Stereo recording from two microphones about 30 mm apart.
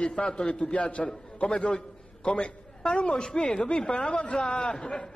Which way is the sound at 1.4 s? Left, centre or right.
Left.